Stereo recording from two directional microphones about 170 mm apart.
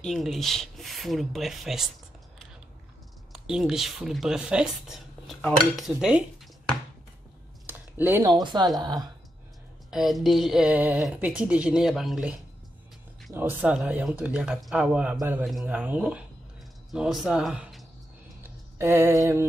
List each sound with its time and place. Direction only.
0.0 s speech: centre (ahead or behind)
3.3 s speech: 5° right (ahead or behind)
7.6 s a sound: 10° right (ahead or behind)
8.3 s a woman's voice: 25° right (ahead or behind)
9.8 s speech: centre (ahead or behind)
18.4 s a sound: 15° right (ahead or behind)